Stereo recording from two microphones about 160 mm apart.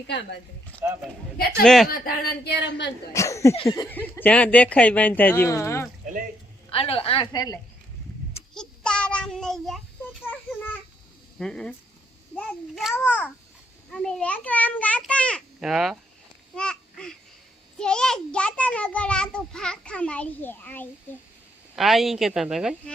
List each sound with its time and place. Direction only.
0.8 s speech: 15° right (ahead or behind)
1.6 s a woman's voice: centre (ahead or behind)
1.9 s speech: 75° left (ahead or behind)
3.1 s speech: 20° left (ahead or behind)
3.5 s a woman's voice: 35° left (ahead or behind)
3.8 s a child's voice: 10° left (ahead or behind)
6.7 s a woman's voice: 35° left (ahead or behind)
8.5 s child singing: 5° left (ahead or behind)
11.3 s a woman's voice: 5° left (ahead or behind)
16.6 s babbling: 5° left (ahead or behind)
17.7 s a child's voice: 5° left (ahead or behind)
21.8 s a woman's voice: centre (ahead or behind)